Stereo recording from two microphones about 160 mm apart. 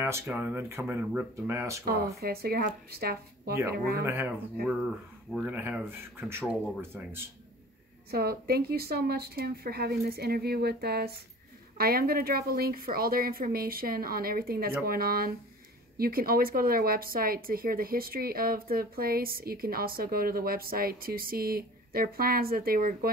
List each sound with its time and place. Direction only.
0.0 s speech: 10° right (ahead or behind)
2.1 s a woman's voice: 70° right (ahead or behind)
4.0 s speech: 15° right (ahead or behind)
4.6 s speech: 5° right (ahead or behind)
8.1 s a woman's voice: 75° right (ahead or behind)